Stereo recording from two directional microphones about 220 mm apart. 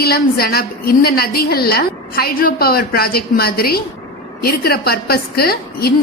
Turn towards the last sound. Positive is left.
turn(degrees=45)  # may be behind; listen again after turning